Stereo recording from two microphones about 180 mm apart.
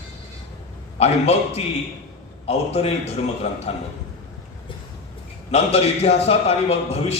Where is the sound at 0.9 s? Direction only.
35° left (ahead or behind).